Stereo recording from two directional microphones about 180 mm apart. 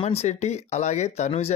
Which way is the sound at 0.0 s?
35° left (ahead or behind).